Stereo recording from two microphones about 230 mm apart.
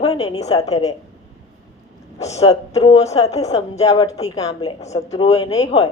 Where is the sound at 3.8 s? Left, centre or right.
Centre.